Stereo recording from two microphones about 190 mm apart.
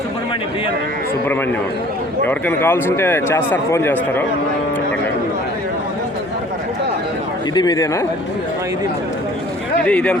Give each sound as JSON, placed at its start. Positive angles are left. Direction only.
{"t": 2.2, "sound": "speech", "side_deg": 10}
{"t": 7.5, "sound": "a man's voice", "side_deg": 20}
{"t": 9.8, "sound": "a man's voice", "side_deg": 5}